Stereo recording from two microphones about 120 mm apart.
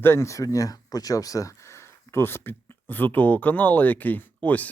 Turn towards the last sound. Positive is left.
turn(degrees=15)  # may be behind; listen again after turning